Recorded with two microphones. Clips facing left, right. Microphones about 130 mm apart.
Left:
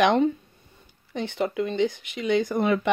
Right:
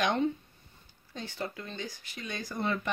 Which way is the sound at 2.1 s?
90° left.